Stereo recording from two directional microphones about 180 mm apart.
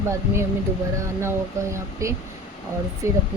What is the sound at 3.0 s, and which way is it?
Speech, 15° right (ahead or behind).